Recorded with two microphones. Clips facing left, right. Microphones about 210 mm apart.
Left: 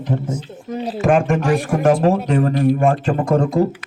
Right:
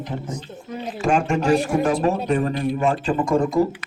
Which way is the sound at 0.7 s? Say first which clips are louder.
Left 6 dB; 35° left (ahead or behind).